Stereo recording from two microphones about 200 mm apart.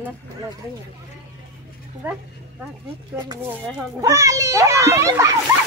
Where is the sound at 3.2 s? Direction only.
20° right (ahead or behind).